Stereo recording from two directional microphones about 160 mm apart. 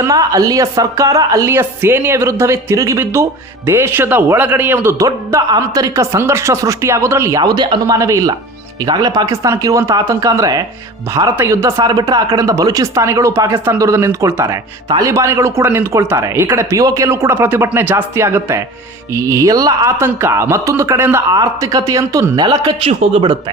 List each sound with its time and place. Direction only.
0.0 s speech: 20° right (ahead or behind)
22.9 s speech: 40° right (ahead or behind)